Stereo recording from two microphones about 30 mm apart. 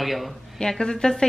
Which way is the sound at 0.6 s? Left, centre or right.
Left.